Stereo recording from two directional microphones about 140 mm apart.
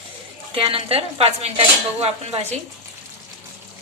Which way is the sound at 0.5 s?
40° right (ahead or behind).